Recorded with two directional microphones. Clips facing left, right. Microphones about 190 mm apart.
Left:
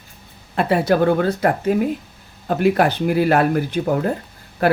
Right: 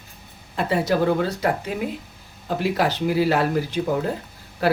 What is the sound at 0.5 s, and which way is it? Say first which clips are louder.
A man's voice: left 4 dB; 60° left (ahead or behind).